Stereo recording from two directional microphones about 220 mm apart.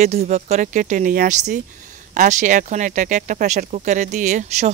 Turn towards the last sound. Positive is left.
turn(degrees=-30)  # may be behind; listen again after turning